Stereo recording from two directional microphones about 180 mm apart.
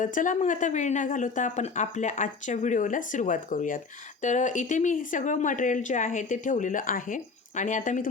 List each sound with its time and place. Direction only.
0.0 s speech: 45° left (ahead or behind)